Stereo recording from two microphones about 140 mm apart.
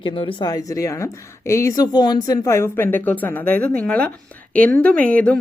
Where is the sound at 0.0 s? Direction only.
35° left (ahead or behind).